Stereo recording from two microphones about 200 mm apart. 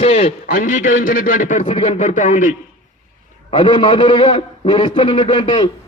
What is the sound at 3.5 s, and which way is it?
A man's voice, 25° left (ahead or behind).